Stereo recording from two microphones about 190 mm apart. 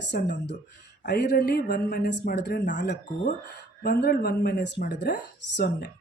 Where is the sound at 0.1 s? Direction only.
65° left (ahead or behind).